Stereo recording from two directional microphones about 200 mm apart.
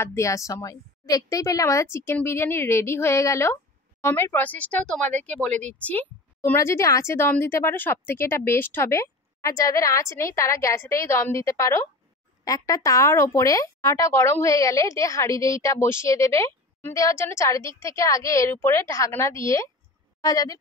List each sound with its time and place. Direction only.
0.0 s speech: 15° left (ahead or behind)